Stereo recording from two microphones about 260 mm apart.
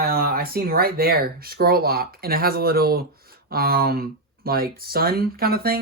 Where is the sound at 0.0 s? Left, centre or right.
Right.